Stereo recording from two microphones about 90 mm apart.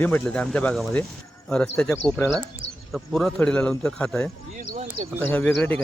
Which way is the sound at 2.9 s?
5° left (ahead or behind).